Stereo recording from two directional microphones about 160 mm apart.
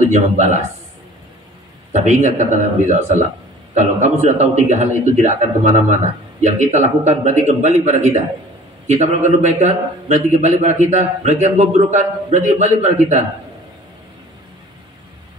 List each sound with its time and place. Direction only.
0.1 s a man's voice: 45° right (ahead or behind)
1.9 s a man's voice: 45° right (ahead or behind)